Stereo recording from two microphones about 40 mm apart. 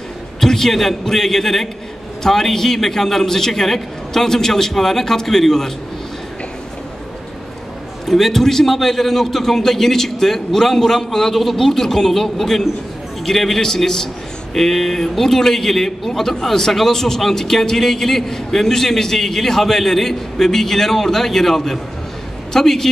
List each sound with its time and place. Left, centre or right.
0.4 s a man's voice: centre
8.0 s a man's voice: centre